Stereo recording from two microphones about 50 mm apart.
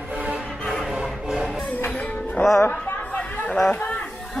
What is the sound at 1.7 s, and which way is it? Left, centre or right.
Music, left.